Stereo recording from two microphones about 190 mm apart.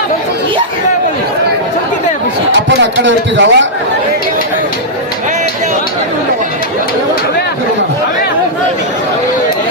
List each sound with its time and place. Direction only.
2.5 s a man's voice: 70° right (ahead or behind)